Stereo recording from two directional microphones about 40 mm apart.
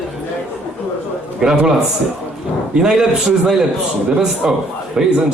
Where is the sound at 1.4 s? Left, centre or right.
Centre.